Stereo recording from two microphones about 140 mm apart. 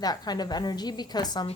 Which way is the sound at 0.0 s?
30° left (ahead or behind).